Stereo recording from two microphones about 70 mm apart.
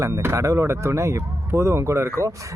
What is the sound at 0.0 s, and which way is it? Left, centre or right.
Speech, right.